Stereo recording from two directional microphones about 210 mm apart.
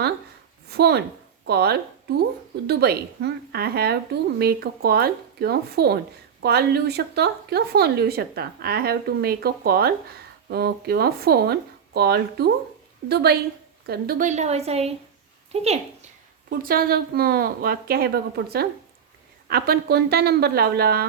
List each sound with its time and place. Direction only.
0.7 s a woman's voice: 50° right (ahead or behind); by 16.0 s 30° right (ahead or behind)
16.5 s a woman's voice: 45° right (ahead or behind)